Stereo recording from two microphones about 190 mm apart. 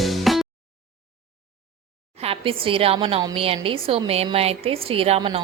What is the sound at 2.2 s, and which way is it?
A woman's voice, 30° right (ahead or behind).